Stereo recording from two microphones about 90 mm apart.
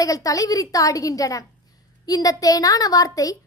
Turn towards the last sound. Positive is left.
turn(degrees=40)  # may be behind; listen again after turning